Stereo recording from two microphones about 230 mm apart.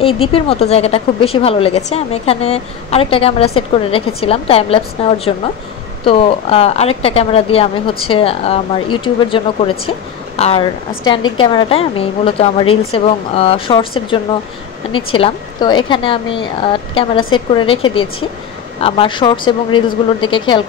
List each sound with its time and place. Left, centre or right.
0.0 s a woman's voice: left